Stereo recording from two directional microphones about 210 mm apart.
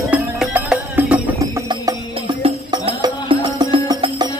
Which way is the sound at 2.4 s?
25° right (ahead or behind).